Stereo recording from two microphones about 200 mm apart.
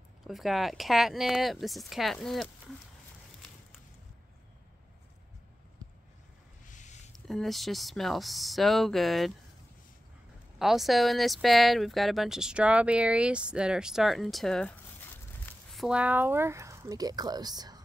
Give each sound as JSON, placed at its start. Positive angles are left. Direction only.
{"t": 0.3, "sound": "speech", "side_deg": 0}
{"t": 6.7, "sound": "a sound", "side_deg": 35}
{"t": 7.1, "sound": "speech", "side_deg": 0}
{"t": 10.6, "sound": "speech", "side_deg": 0}